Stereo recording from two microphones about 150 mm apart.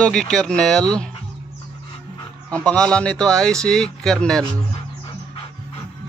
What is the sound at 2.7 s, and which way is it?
Speech, 5° left (ahead or behind).